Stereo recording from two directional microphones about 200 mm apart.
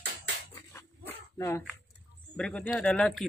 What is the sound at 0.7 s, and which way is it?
Dog, 10° left (ahead or behind).